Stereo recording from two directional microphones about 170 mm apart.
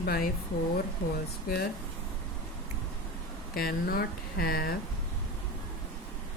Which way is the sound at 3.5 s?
60° left (ahead or behind).